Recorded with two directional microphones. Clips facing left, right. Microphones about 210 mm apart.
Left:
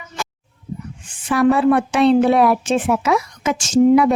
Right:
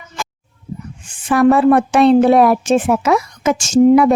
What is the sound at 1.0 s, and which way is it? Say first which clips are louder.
A woman's voice: right 3 dB; 50° right (ahead or behind).